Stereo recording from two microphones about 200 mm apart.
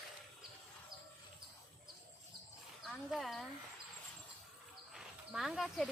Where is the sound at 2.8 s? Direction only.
Centre (ahead or behind).